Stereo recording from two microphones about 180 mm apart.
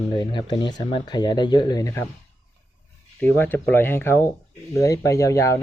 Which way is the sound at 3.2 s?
10° left (ahead or behind).